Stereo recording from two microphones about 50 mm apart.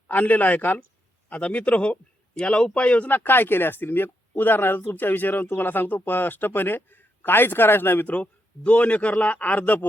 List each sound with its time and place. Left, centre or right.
0.1 s a man's voice: left
3.1 s speech: left
8.1 s a man's voice: left